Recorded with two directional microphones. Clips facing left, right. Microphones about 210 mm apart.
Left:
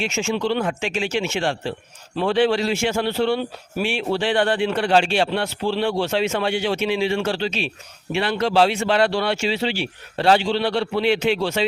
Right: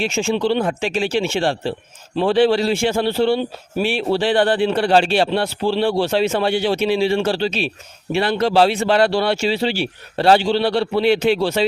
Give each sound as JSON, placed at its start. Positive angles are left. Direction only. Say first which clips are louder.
{"t": 0.0, "sound": "a man's voice", "louder": "right 4 dB", "side_deg": -30}